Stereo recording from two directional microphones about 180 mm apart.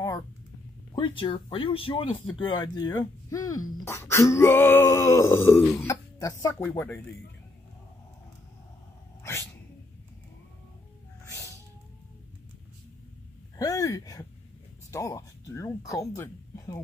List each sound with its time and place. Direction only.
0.9 s speech: 25° left (ahead or behind); by 7.0 s 10° left (ahead or behind)
9.2 s sneeze: 15° left (ahead or behind)
11.2 s cat: 15° left (ahead or behind)
13.6 s a sound: 20° left (ahead or behind)
14.9 s speech: 15° left (ahead or behind)